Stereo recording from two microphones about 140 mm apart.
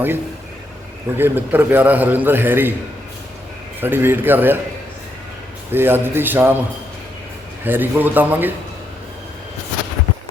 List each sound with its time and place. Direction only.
1.1 s a man's voice: 15° right (ahead or behind)
3.8 s a man's voice: 15° right (ahead or behind)
5.7 s a man's voice: 15° right (ahead or behind)
7.6 s a man's voice: 15° right (ahead or behind)